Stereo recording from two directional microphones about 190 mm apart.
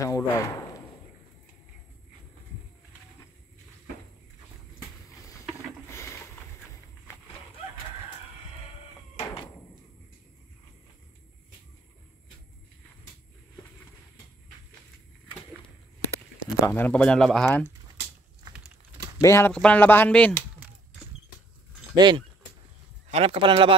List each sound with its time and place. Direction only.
0.0 s speech: 15° left (ahead or behind)
9.1 s a sound: 30° left (ahead or behind)
16.6 s speech: 10° left (ahead or behind)
19.2 s speech: 15° left (ahead or behind)
21.9 s speech: 25° right (ahead or behind)